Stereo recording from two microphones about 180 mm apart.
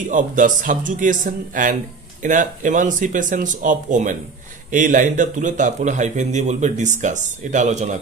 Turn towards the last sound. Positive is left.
turn(degrees=-40)  # may be behind; listen again after turning